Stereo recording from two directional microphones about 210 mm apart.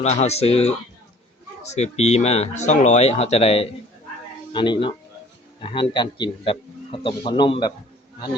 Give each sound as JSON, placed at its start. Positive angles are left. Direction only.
{"t": 0.0, "sound": "a man's voice", "side_deg": 30}